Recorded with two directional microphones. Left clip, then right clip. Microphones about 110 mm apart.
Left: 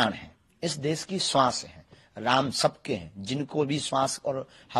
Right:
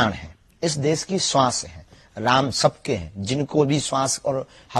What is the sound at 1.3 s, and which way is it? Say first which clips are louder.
Speech: right 3 dB; 20° right (ahead or behind).